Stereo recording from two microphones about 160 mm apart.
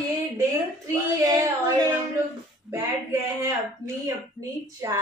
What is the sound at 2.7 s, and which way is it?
Speech, 20° right (ahead or behind).